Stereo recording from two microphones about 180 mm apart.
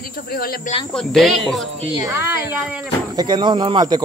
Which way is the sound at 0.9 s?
Centre (ahead or behind).